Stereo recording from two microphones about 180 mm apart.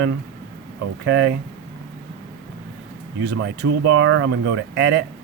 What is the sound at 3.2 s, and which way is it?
Speech, 70° right (ahead or behind).